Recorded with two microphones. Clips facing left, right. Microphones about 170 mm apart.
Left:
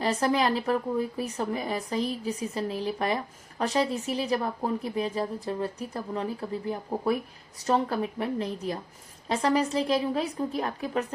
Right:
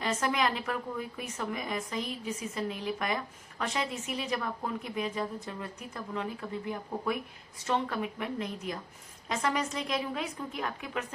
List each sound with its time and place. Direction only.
0.0 s a woman's voice: 35° left (ahead or behind)